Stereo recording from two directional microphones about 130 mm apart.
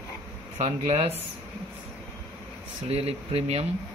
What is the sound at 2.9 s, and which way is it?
Speech, 50° right (ahead or behind).